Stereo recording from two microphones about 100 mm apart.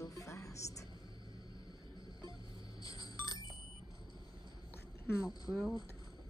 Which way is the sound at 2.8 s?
35° left (ahead or behind).